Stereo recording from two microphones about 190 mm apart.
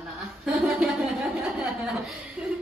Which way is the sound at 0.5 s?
Centre (ahead or behind).